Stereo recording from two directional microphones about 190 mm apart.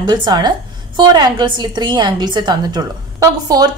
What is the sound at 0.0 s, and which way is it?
A woman's voice, 25° right (ahead or behind).